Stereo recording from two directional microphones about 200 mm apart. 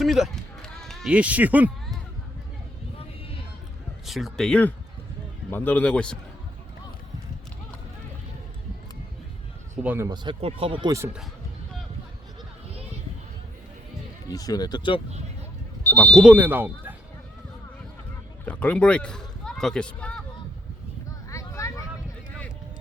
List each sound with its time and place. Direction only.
0.0 s run: centre (ahead or behind)
4.0 s a man's voice: centre (ahead or behind)
9.8 s speech: 10° right (ahead or behind)
10.1 s speech: 25° right (ahead or behind)
14.3 s speech: 20° left (ahead or behind)
15.8 s vehicle: 5° left (ahead or behind)
16.2 s speech: 10° right (ahead or behind)
18.4 s speech: 5° left (ahead or behind)
21.2 s a sound: 15° left (ahead or behind)